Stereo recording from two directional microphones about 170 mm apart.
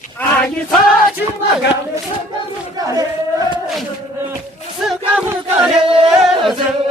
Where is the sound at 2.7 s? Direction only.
20° right (ahead or behind).